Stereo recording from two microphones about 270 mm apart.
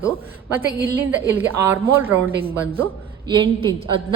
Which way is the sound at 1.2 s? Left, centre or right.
Centre.